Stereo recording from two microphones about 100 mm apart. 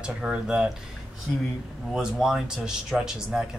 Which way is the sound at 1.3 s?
15° left (ahead or behind).